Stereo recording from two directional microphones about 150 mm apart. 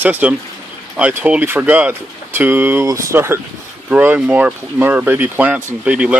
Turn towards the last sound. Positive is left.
turn(degrees=-10)  # may be behind; listen again after turning